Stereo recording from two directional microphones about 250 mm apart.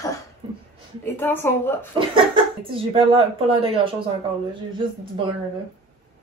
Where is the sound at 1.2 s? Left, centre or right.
Centre.